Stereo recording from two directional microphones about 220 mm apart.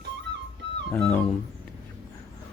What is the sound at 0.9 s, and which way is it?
Speech, 25° left (ahead or behind).